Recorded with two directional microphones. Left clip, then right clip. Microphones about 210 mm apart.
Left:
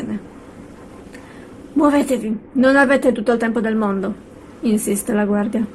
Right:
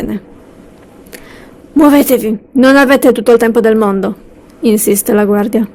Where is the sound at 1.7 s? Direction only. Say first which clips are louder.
Right 8 dB; 50° right (ahead or behind).